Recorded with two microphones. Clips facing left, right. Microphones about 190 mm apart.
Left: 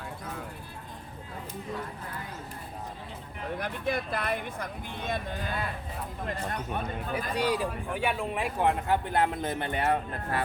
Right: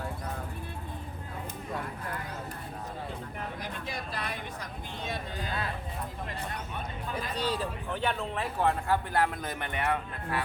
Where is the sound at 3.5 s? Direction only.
55° left (ahead or behind).